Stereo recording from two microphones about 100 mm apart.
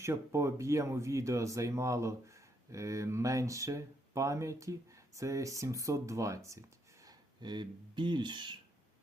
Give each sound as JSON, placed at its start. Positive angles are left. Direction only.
{"t": 0.0, "sound": "speech", "side_deg": -30}